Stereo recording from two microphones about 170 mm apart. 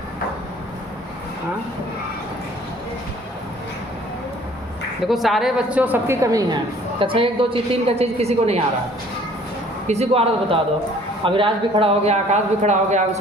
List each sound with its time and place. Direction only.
5.0 s a woman's voice: centre (ahead or behind); by 6.6 s 20° right (ahead or behind)
7.0 s a man's voice: 30° right (ahead or behind)
9.8 s a man's voice: 40° right (ahead or behind)